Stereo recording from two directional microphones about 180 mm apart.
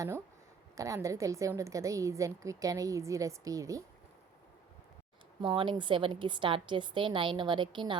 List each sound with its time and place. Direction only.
0.8 s a woman's voice: 15° right (ahead or behind)
5.4 s a woman's voice: 25° right (ahead or behind)